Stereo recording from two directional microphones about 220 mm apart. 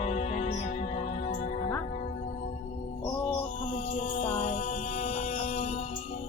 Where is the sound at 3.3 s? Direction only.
30° left (ahead or behind).